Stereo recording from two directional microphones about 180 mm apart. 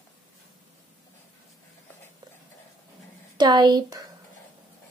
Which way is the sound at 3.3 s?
25° right (ahead or behind).